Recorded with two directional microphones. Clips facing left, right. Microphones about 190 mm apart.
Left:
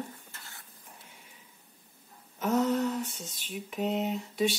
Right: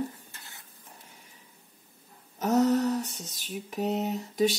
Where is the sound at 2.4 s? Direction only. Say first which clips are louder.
Right 4 dB; 40° right (ahead or behind).